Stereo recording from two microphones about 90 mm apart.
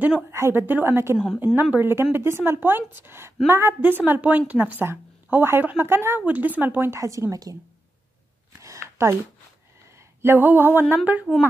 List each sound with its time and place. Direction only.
0.3 s a woman's voice: 30° right (ahead or behind)
7.0 s speech: 40° right (ahead or behind)
8.5 s a sound: 35° right (ahead or behind)